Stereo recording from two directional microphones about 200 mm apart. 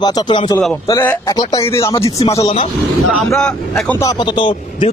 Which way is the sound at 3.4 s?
5° left (ahead or behind).